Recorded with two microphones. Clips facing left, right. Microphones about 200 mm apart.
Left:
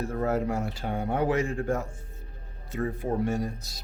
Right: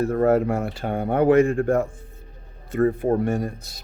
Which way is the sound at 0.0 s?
60° right (ahead or behind).